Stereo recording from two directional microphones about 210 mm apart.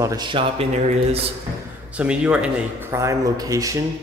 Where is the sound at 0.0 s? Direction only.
20° right (ahead or behind).